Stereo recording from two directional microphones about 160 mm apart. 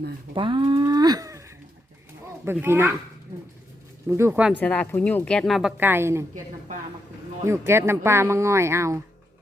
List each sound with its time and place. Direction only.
0.3 s speech: 30° right (ahead or behind)
2.4 s speech: 15° right (ahead or behind)
4.1 s speech: 15° right (ahead or behind)
4.5 s a woman's voice: 10° left (ahead or behind); by 6.2 s 15° right (ahead or behind)
7.4 s speech: 15° right (ahead or behind)